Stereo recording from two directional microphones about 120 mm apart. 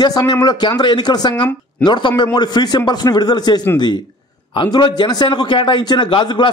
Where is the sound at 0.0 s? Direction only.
35° left (ahead or behind).